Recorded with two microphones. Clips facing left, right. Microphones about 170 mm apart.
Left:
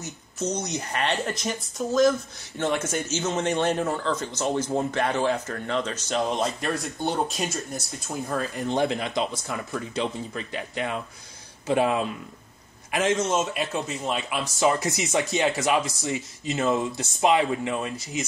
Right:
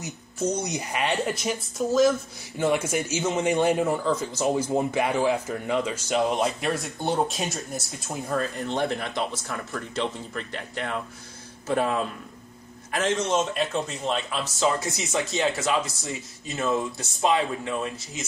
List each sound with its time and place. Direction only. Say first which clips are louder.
0.7 s speech: even; 10° right (ahead or behind)
8.6 s speech: left 2 dB; 15° left (ahead or behind)
13.2 s speech: right 1 dB; centre (ahead or behind); by 17.9 s 20° left (ahead or behind)